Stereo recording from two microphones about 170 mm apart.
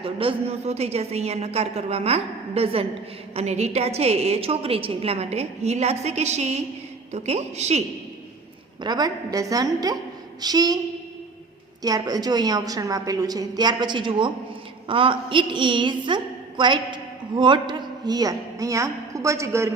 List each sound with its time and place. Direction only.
0.0 s a woman's voice: 30° right (ahead or behind)
8.8 s a woman's voice: 25° right (ahead or behind)
11.8 s a woman's voice: 20° right (ahead or behind)